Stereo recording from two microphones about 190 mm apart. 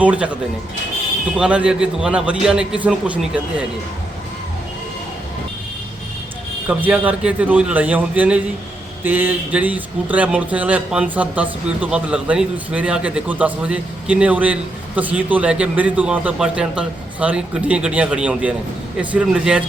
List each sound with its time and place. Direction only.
0.0 s speech: 5° right (ahead or behind)
1.4 s a man's voice: 5° right (ahead or behind)
6.7 s a man's voice: 5° right (ahead or behind)